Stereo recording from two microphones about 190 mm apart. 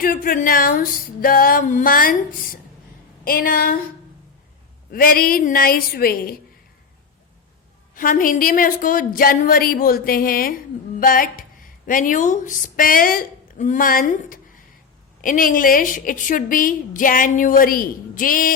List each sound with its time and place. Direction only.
0.0 s a woman's voice: 50° left (ahead or behind)
4.9 s a woman's voice: 50° left (ahead or behind)
7.9 s a woman's voice: 45° left (ahead or behind)